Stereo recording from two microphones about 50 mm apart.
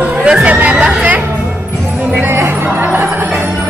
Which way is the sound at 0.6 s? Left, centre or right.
Right.